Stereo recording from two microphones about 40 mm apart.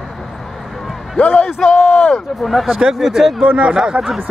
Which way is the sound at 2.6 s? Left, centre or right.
Centre.